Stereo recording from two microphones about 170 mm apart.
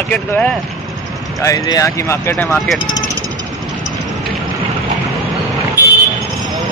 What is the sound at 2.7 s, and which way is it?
Speech, 25° left (ahead or behind).